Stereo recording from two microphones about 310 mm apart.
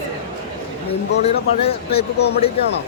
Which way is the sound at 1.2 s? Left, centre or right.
Centre.